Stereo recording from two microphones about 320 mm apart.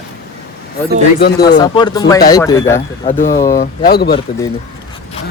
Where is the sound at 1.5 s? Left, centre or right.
Centre.